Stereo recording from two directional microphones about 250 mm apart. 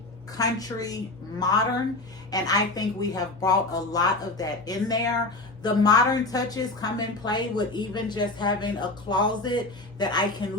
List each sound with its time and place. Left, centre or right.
0.3 s a woman's voice: centre